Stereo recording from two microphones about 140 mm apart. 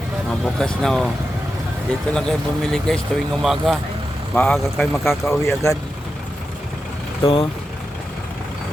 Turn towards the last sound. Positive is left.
turn(degrees=40)  # may be behind; listen again after turning